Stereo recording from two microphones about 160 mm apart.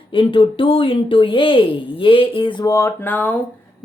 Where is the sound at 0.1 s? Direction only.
35° left (ahead or behind); by 3.3 s 10° left (ahead or behind).